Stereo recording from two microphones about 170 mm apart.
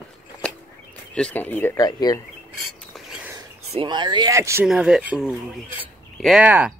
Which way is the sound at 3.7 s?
25° right (ahead or behind).